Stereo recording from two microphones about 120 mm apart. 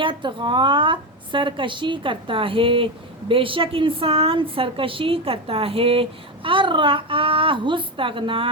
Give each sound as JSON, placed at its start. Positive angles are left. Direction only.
{"t": 0.0, "sound": "a woman's voice", "side_deg": -45}